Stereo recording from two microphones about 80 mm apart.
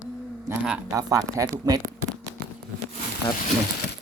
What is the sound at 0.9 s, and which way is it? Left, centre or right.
Speech, right.